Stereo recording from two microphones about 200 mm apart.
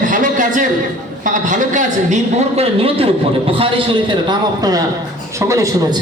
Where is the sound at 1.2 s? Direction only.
40° right (ahead or behind).